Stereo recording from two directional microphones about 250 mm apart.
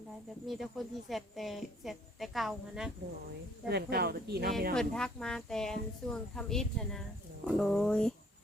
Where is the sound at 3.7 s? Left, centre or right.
Right.